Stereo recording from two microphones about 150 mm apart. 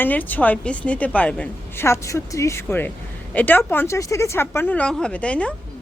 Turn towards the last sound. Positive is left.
turn(degrees=10)  # may be behind; listen again after turning